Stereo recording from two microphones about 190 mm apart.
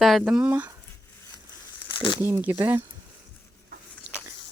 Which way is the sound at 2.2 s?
10° right (ahead or behind).